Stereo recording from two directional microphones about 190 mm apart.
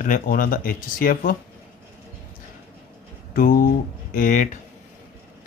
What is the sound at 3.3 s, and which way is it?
A man's voice, 45° left (ahead or behind).